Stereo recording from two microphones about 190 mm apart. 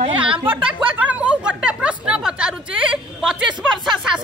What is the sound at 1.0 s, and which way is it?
A woman's voice, 5° right (ahead or behind).